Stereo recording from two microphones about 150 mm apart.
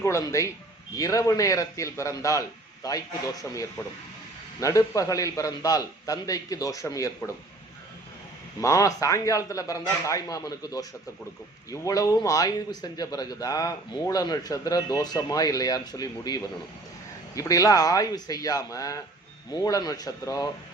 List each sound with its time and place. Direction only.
0.0 s a man's voice: 20° left (ahead or behind)
8.6 s a man's voice: 20° left (ahead or behind)